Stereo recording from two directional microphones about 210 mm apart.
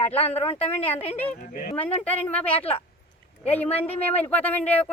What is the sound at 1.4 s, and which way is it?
Speech, 40° left (ahead or behind).